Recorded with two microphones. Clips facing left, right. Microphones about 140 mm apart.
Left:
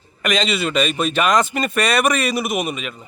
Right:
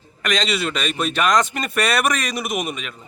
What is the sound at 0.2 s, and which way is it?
Speech, 5° left (ahead or behind).